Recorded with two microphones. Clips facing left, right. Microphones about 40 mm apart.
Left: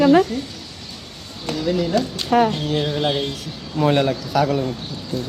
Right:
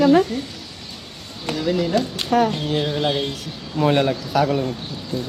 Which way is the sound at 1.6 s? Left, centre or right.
Centre.